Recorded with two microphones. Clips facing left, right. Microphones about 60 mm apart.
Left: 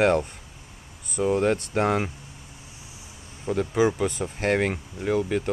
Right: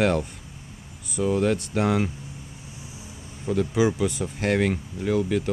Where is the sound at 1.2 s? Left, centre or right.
Left.